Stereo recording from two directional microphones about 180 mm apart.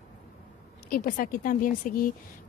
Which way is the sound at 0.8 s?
50° left (ahead or behind).